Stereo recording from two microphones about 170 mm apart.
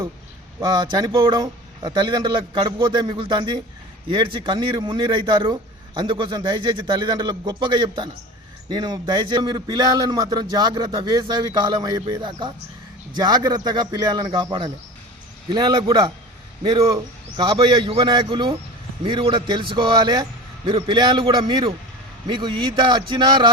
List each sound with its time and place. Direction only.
0.6 s a man's voice: 25° right (ahead or behind)